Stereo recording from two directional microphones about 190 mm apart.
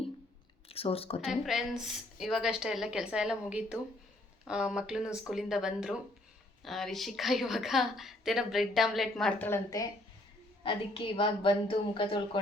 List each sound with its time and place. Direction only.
0.7 s speech: 30° left (ahead or behind)
1.2 s a woman's voice: 5° right (ahead or behind); by 12.4 s 25° left (ahead or behind)